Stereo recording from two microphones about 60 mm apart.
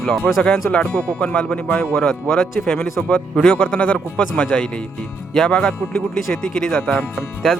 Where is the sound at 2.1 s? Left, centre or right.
Centre.